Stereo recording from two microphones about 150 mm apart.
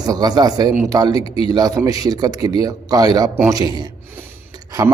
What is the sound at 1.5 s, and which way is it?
Speech, 25° right (ahead or behind).